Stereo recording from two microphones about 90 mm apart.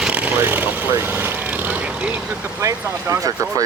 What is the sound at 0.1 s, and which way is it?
Vehicle, 20° right (ahead or behind).